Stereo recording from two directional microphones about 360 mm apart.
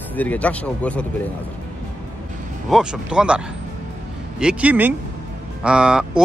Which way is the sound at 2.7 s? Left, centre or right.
Centre.